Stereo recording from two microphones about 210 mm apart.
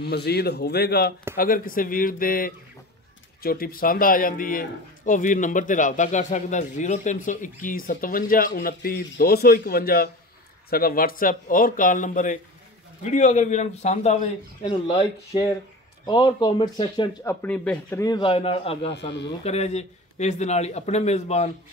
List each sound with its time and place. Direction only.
0.0 s a man's voice: 50° left (ahead or behind); by 17.1 s 25° left (ahead or behind)
17.2 s a man's voice: 10° left (ahead or behind); by 21.5 s 30° left (ahead or behind)